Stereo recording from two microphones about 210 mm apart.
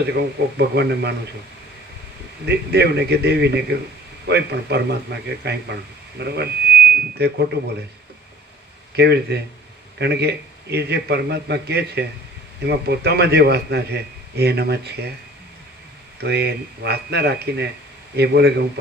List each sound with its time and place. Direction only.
0.0 s a man's voice: 50° right (ahead or behind)
2.5 s a man's voice: 50° right (ahead or behind)
9.0 s a man's voice: 50° right (ahead or behind)
16.2 s a man's voice: 50° right (ahead or behind)